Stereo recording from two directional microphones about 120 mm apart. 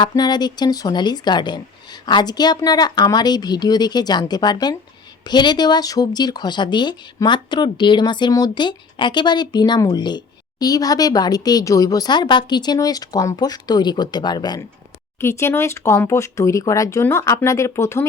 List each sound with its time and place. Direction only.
0.0 s speech: 35° left (ahead or behind)
15.2 s speech: 20° left (ahead or behind)